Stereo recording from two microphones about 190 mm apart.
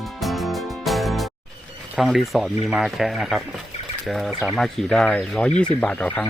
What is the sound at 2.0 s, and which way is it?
Speech, centre (ahead or behind).